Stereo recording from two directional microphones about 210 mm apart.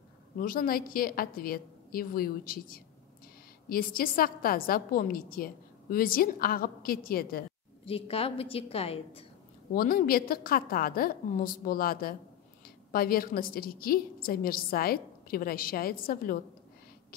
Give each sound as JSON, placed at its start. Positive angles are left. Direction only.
{"t": 0.4, "sound": "a woman's voice", "side_deg": 45}
{"t": 7.8, "sound": "a woman's voice", "side_deg": 25}
{"t": 9.8, "sound": "a woman's voice", "side_deg": 45}